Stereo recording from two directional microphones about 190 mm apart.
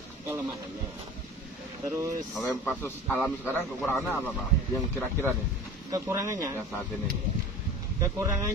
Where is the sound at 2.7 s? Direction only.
10° left (ahead or behind).